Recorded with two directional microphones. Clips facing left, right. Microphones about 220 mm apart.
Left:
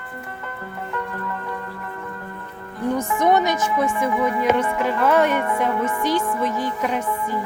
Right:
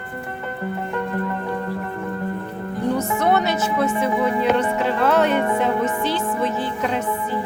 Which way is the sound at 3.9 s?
25° right (ahead or behind).